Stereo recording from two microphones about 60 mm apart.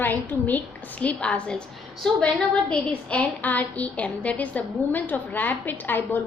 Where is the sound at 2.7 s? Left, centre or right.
Left.